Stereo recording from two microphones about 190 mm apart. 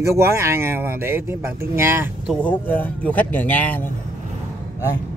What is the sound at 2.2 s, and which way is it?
Speech, 10° left (ahead or behind).